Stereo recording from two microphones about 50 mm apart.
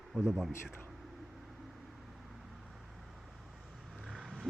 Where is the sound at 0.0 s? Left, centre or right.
Centre.